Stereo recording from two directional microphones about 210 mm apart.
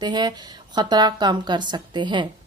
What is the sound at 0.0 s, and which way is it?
Speech, 20° right (ahead or behind).